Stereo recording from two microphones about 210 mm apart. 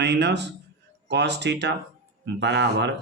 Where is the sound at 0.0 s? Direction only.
55° right (ahead or behind).